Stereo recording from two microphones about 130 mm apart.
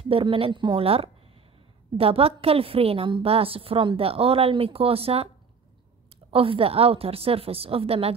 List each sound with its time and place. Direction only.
0.0 s a woman's voice: 45° right (ahead or behind)
6.3 s a woman's voice: 45° right (ahead or behind)